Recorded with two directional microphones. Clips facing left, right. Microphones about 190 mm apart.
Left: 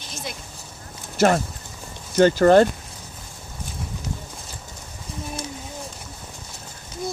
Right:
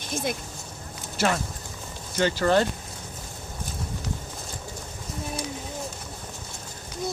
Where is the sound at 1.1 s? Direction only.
50° left (ahead or behind).